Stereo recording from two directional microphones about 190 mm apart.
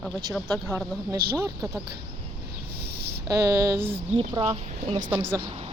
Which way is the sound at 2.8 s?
55° right (ahead or behind).